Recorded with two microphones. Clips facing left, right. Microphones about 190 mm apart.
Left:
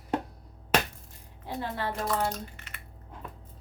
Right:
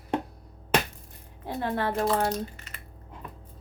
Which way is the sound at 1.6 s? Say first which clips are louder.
Right 5 dB; 55° right (ahead or behind).